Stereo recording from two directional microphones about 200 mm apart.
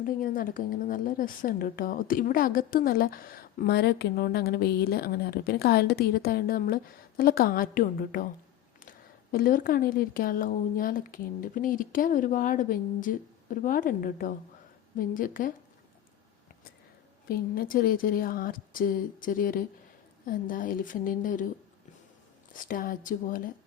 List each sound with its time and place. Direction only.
0.0 s a woman's voice: 45° left (ahead or behind)
9.3 s a woman's voice: 45° left (ahead or behind)
17.2 s a woman's voice: 45° left (ahead or behind)
22.5 s a woman's voice: 45° left (ahead or behind)